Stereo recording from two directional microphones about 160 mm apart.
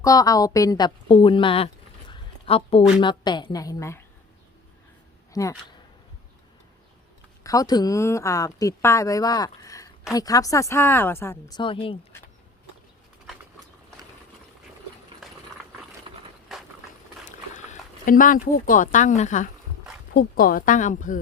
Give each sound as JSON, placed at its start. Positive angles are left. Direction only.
{"t": 0.0, "sound": "a woman's voice", "side_deg": 20}
{"t": 5.3, "sound": "speech", "side_deg": 20}
{"t": 7.4, "sound": "a woman's voice", "side_deg": 20}
{"t": 15.2, "sound": "horse", "side_deg": 0}
{"t": 16.1, "sound": "a sound", "side_deg": -30}
{"t": 16.5, "sound": "clip-clop", "side_deg": 0}
{"t": 17.5, "sound": "speech", "side_deg": 55}
{"t": 20.1, "sound": "speech", "side_deg": 65}